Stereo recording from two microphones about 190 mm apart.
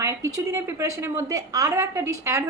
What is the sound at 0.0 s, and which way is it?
A woman's voice, 15° right (ahead or behind).